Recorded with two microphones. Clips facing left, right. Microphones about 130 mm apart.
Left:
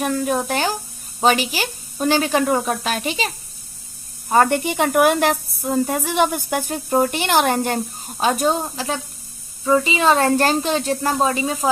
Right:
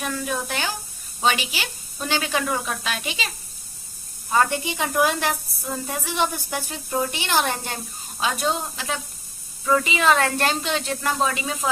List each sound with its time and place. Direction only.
0.0 s a woman's voice: 45° left (ahead or behind)